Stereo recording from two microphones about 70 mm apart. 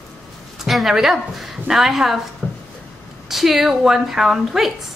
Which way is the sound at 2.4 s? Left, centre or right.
Centre.